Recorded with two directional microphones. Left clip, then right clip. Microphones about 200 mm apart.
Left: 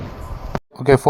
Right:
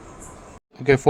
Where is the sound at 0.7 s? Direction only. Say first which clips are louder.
Left 4 dB; 10° left (ahead or behind).